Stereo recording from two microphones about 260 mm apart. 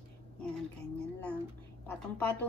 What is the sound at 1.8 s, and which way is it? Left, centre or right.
Speech, centre.